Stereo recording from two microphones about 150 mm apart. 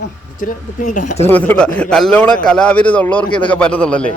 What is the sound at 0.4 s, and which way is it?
Speech, 65° left (ahead or behind).